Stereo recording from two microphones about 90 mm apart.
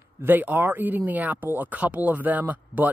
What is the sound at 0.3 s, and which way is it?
Speech, 20° right (ahead or behind).